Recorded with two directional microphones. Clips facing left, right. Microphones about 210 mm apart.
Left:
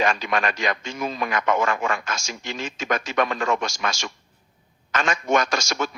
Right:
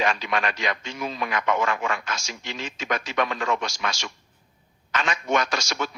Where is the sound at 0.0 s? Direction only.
45° left (ahead or behind).